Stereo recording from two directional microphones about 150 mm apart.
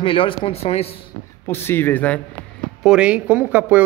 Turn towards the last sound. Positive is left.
turn(degrees=-10)  # may be behind; listen again after turning